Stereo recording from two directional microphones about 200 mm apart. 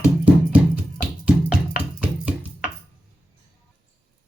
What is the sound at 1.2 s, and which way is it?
Music, 5° right (ahead or behind).